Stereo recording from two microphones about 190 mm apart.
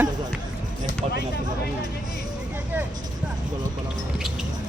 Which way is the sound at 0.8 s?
55° left (ahead or behind).